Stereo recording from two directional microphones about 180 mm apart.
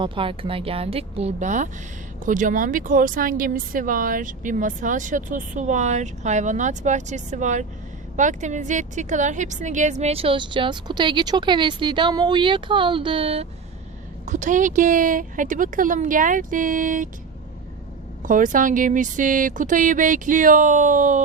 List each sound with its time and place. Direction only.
0.0 s a woman's voice: 30° right (ahead or behind)
14.3 s speech: 45° right (ahead or behind)
18.2 s speech: 45° right (ahead or behind)